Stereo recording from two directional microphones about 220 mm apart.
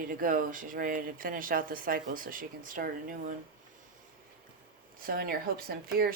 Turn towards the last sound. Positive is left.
turn(degrees=-45)  # may be behind; listen again after turning